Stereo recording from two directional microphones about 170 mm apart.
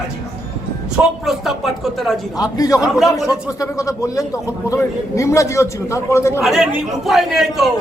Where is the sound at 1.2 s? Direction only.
Centre (ahead or behind).